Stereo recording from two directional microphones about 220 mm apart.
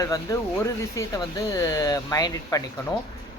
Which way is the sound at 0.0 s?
15° left (ahead or behind).